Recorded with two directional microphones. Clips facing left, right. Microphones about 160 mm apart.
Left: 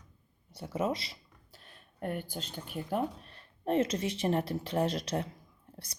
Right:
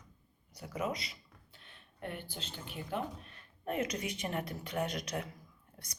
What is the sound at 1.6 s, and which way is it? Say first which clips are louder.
Speech: left 6 dB; 40° left (ahead or behind).